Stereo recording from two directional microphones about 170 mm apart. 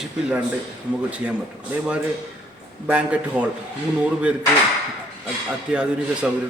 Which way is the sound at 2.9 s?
5° right (ahead or behind).